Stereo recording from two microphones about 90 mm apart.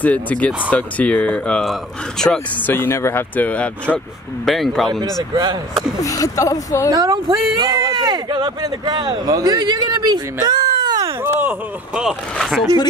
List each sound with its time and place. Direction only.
0.0 s speech: 15° left (ahead or behind)
1.6 s speech: 5° left (ahead or behind)
2.6 s speech: 25° left (ahead or behind)
3.4 s speech: 15° left (ahead or behind)
4.5 s speech: centre (ahead or behind)
5.3 s speech: 50° right (ahead or behind)
5.9 s speech: 40° left (ahead or behind)
6.9 s speech: 45° right (ahead or behind)
11.9 s speech: 5° right (ahead or behind)